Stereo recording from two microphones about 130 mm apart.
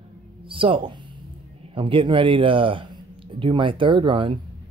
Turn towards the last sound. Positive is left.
turn(degrees=-40)  # may be behind; listen again after turning